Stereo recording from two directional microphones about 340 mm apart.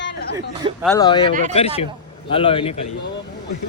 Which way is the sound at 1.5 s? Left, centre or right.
Centre.